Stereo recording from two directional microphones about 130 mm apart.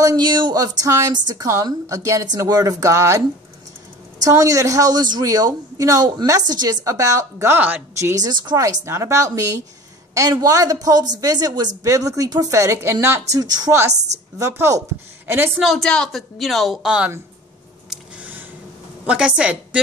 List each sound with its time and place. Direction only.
0.0 s a woman's voice: 30° right (ahead or behind); by 7.8 s 15° right (ahead or behind)
8.0 s a woman's voice: 25° right (ahead or behind)
13.3 s a woman's voice: 30° right (ahead or behind)
15.6 s a woman's voice: centre (ahead or behind)
19.0 s a woman's voice: 5° right (ahead or behind)